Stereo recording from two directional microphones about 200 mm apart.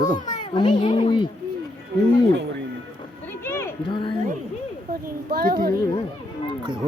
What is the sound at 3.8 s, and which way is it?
Speech, 25° left (ahead or behind).